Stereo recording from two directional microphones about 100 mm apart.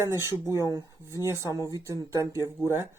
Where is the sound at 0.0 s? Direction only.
25° right (ahead or behind).